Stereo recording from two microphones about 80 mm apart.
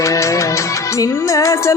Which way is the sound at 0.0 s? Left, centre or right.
Left.